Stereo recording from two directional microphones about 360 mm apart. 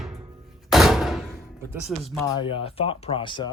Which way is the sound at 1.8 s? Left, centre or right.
Centre.